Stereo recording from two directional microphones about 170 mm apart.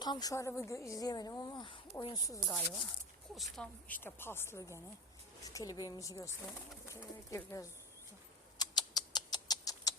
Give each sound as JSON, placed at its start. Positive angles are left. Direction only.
{"t": 0.0, "sound": "speech", "side_deg": 25}
{"t": 2.5, "sound": "speech", "side_deg": 5}
{"t": 8.5, "sound": "a sound", "side_deg": 25}